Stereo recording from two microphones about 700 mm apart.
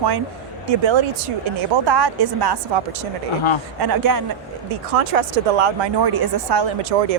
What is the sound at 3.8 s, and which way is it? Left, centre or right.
Speech, right.